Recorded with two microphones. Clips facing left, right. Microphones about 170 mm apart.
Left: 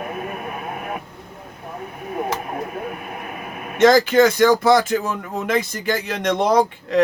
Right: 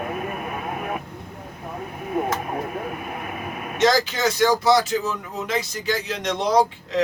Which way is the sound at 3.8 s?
55° left (ahead or behind).